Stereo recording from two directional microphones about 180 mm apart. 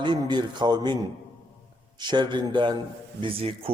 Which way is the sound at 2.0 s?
25° right (ahead or behind).